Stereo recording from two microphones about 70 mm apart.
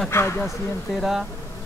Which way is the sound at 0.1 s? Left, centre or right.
Left.